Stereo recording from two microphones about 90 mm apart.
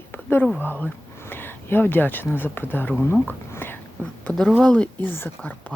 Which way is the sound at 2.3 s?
25° left (ahead or behind).